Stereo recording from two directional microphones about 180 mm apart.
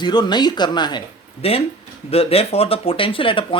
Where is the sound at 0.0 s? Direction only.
25° left (ahead or behind).